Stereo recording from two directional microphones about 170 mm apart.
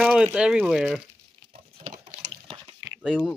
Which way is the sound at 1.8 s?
50° right (ahead or behind).